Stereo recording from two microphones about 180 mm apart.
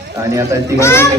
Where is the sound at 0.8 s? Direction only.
15° left (ahead or behind).